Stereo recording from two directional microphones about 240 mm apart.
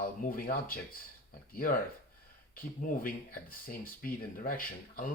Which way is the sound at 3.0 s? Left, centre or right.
Left.